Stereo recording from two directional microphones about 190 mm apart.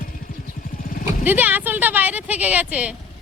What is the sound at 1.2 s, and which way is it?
Speech, 10° right (ahead or behind).